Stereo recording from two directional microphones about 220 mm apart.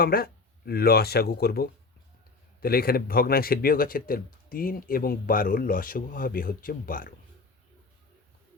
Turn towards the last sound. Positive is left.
turn(degrees=40)  # may be behind; listen again after turning